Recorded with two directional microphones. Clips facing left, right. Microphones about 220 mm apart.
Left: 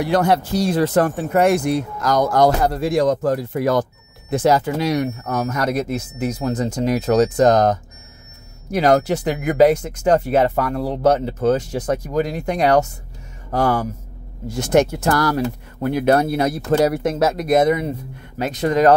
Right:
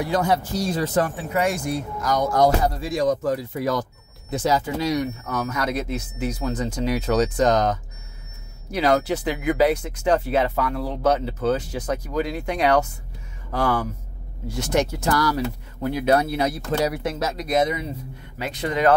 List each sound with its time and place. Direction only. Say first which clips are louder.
0.0 s speech: left 4 dB; 70° left (ahead or behind)
18.4 s speech: left 6 dB; 45° left (ahead or behind)